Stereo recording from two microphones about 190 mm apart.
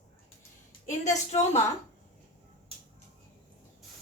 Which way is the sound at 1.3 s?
35° left (ahead or behind).